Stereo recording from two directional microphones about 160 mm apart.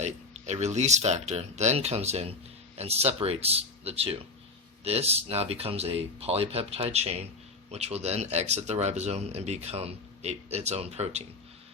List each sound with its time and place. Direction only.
0.0 s speech: 45° right (ahead or behind)